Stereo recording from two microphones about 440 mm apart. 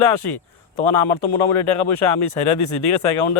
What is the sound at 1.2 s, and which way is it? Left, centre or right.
A man's voice, left.